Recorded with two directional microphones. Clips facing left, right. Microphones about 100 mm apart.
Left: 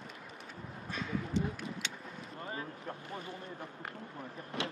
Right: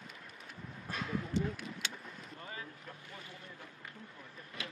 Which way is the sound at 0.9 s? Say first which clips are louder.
Left 1 dB; centre (ahead or behind).